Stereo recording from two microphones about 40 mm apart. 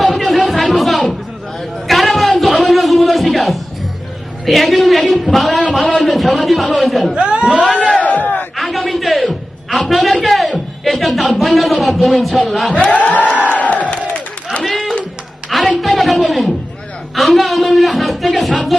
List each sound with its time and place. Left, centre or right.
0.0 s a sound: centre
4.4 s speech: centre
7.1 s speech: right
7.8 s speech: left
8.0 s battle cry: left
8.5 s a sound: centre
12.7 s crowd: left
14.6 s a sound: centre
17.2 s speech: centre